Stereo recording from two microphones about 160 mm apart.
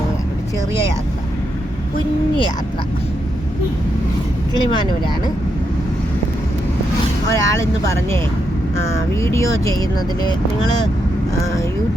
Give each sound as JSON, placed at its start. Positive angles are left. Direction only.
{"t": 4.7, "sound": "speech", "side_deg": 30}
{"t": 7.3, "sound": "speech", "side_deg": 20}